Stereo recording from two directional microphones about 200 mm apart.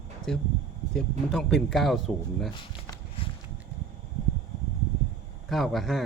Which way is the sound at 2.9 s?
25° left (ahead or behind).